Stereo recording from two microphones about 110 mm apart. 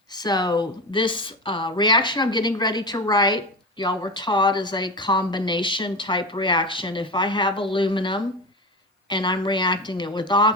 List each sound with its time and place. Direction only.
0.2 s speech: 40° left (ahead or behind)